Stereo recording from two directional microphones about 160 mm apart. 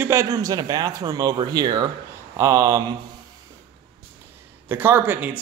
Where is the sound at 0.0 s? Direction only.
15° right (ahead or behind).